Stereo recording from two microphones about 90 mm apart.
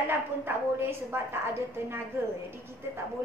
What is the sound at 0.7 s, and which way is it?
A woman's voice, 30° right (ahead or behind).